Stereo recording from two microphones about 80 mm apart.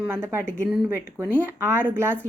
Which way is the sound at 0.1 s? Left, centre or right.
Right.